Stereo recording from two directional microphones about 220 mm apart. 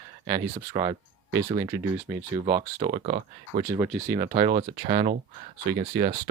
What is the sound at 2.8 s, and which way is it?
Speech, 35° right (ahead or behind).